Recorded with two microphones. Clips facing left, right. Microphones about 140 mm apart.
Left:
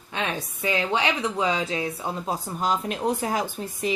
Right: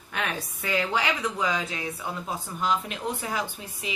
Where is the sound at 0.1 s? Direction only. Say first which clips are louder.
Left 2 dB; 20° left (ahead or behind).